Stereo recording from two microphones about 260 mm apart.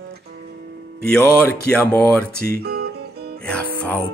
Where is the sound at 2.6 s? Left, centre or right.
Right.